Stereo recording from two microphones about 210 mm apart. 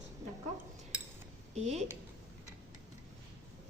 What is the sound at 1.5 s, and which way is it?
Speech, 30° right (ahead or behind).